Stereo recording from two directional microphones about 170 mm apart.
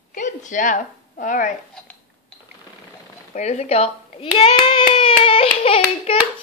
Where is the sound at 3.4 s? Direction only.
40° left (ahead or behind).